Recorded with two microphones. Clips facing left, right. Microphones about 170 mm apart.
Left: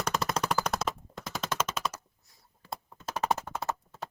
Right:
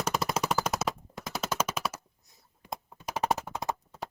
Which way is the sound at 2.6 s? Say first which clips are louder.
Right 1 dB; 15° right (ahead or behind).